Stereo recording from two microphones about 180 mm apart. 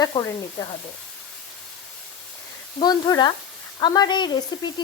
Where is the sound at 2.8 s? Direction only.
25° left (ahead or behind).